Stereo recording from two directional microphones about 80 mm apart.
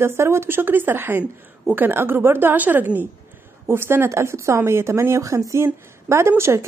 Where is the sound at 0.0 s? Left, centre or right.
Right.